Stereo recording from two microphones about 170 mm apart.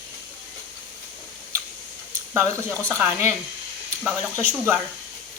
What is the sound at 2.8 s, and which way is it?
Speech, 15° right (ahead or behind).